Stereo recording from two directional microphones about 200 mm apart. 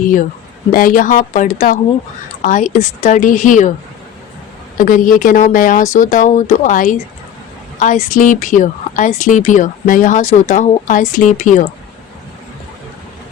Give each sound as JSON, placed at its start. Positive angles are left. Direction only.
{"t": 0.7, "sound": "speech", "side_deg": 45}
{"t": 4.8, "sound": "speech", "side_deg": 40}